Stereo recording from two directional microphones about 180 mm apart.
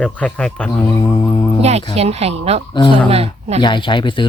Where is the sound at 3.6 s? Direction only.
25° left (ahead or behind).